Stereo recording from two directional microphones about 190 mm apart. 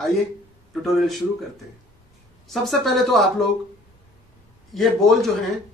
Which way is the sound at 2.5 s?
Centre (ahead or behind).